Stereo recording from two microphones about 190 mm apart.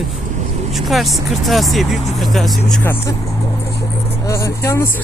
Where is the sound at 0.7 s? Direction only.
Centre (ahead or behind).